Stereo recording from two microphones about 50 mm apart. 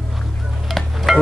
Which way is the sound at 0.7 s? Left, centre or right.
Centre.